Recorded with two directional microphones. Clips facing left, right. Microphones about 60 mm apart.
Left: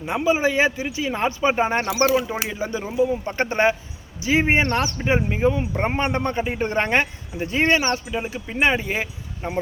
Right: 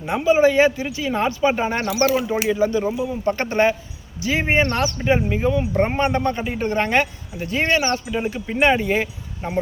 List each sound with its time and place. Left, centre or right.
0.1 s speech: centre
8.1 s speech: centre